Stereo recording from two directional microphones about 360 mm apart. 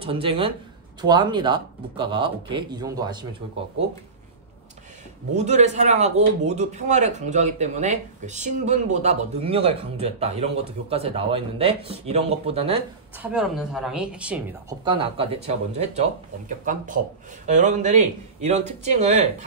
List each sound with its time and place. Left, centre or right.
0.0 s speech: centre
5.4 s speech: centre
13.2 s speech: centre